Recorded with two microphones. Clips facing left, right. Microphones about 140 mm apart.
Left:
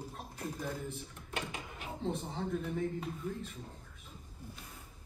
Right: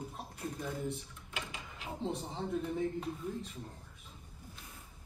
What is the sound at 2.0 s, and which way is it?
Speech, centre (ahead or behind).